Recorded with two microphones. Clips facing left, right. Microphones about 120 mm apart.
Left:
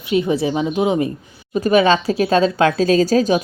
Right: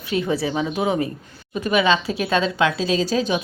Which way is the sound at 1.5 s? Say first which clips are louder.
Left 5 dB; 40° left (ahead or behind).